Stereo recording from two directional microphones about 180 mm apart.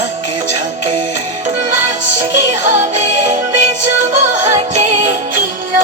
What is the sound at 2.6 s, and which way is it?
Music, 40° right (ahead or behind).